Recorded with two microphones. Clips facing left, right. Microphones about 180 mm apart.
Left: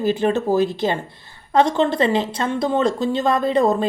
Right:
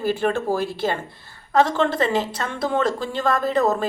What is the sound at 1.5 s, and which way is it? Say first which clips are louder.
A woman's voice: left 2 dB; 25° left (ahead or behind).